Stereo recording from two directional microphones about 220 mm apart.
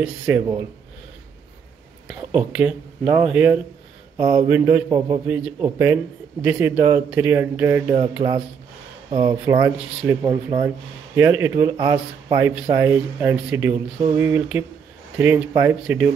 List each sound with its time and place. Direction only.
0.0 s speech: 10° right (ahead or behind)
2.0 s speech: 5° right (ahead or behind)
7.9 s a sound: 25° right (ahead or behind)
9.1 s speech: 20° right (ahead or behind)